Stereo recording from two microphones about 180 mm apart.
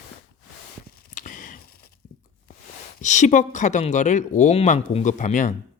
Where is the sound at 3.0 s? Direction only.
40° left (ahead or behind).